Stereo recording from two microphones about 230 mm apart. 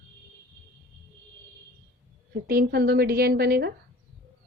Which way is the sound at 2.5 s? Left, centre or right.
Right.